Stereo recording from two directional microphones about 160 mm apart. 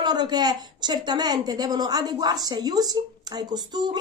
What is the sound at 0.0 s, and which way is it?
A woman's voice, 25° right (ahead or behind).